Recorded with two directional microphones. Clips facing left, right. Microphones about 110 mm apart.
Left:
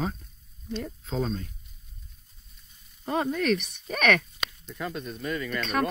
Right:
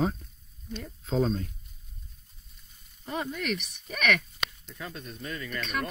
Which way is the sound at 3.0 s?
40° left (ahead or behind).